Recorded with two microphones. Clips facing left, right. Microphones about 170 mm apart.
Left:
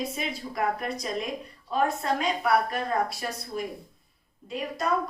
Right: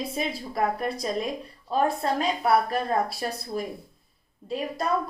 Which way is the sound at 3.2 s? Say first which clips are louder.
Right 3 dB; 40° right (ahead or behind).